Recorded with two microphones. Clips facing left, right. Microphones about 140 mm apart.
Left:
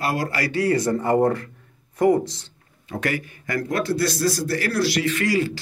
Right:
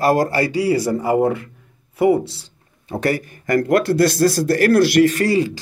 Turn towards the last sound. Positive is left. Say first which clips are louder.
# right 8 dB
turn(degrees=-45)  # may be behind; listen again after turning